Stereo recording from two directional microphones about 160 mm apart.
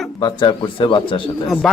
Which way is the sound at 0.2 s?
30° left (ahead or behind).